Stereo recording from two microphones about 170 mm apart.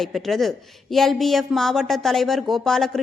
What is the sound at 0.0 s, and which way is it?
Speech, centre (ahead or behind).